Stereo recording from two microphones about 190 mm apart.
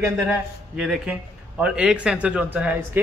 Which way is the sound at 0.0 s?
5° right (ahead or behind).